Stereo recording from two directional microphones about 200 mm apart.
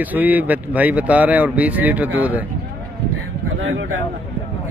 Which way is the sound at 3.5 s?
70° right (ahead or behind).